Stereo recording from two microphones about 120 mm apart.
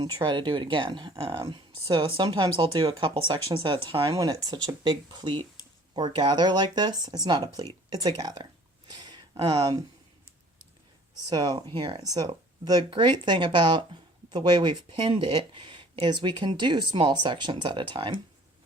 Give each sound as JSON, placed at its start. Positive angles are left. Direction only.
{"t": 0.0, "sound": "speech", "side_deg": -40}
{"t": 4.2, "sound": "speech", "side_deg": -35}
{"t": 8.9, "sound": "a sound", "side_deg": -35}
{"t": 11.3, "sound": "speech", "side_deg": -35}
{"t": 11.7, "sound": "speech", "side_deg": -45}